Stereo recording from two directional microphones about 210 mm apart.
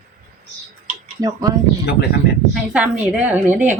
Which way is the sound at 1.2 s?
20° right (ahead or behind).